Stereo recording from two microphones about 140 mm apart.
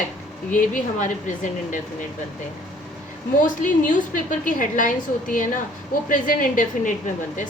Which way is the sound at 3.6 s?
70° left (ahead or behind).